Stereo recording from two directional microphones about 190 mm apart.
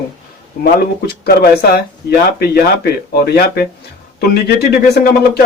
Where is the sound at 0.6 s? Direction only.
55° left (ahead or behind).